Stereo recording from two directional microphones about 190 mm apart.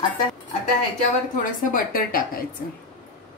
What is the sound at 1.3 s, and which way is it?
A woman's voice, 45° left (ahead or behind).